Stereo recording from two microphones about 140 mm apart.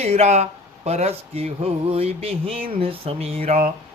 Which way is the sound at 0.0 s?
50° right (ahead or behind).